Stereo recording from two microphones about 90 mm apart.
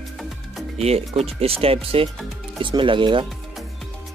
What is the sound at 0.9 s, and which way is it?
Speech, 90° right.